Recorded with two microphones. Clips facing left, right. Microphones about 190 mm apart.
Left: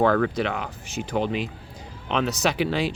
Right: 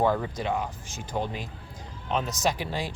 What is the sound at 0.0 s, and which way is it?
Speech, 85° left.